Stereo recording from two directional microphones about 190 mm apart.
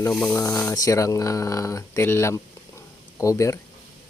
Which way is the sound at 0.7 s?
20° left (ahead or behind).